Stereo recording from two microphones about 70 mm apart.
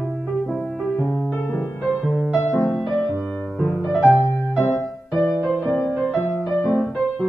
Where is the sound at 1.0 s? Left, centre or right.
Left.